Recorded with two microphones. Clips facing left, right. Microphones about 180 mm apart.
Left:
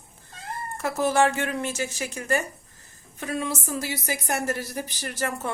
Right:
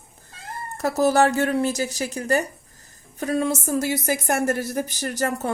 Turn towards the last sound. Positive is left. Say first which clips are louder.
# right 5 dB
turn(degrees=-40)  # may be behind; listen again after turning